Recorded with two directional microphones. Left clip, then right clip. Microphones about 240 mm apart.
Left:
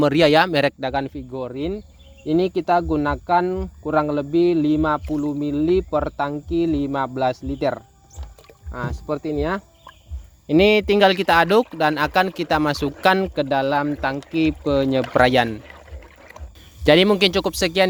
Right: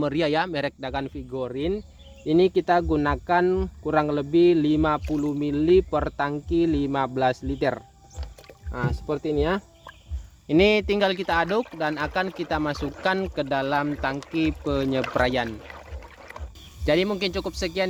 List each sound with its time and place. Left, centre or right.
0.0 s speech: left; by 9.6 s centre
10.4 s speech: left
15.4 s speech: centre
16.8 s speech: left